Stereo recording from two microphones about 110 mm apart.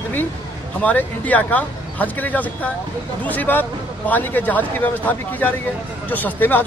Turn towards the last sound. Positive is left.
turn(degrees=15)  # may be behind; listen again after turning